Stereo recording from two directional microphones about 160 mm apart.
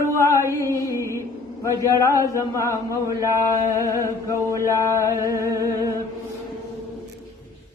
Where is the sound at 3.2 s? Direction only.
20° right (ahead or behind).